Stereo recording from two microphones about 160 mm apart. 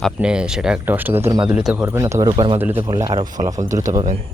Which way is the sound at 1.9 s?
20° right (ahead or behind).